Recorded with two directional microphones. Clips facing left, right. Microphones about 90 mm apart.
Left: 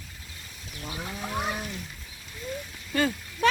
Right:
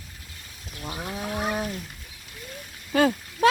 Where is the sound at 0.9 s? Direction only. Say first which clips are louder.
Right 3 dB; 15° right (ahead or behind).